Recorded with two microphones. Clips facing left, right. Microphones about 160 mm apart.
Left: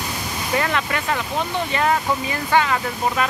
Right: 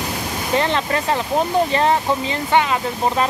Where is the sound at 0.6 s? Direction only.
30° right (ahead or behind).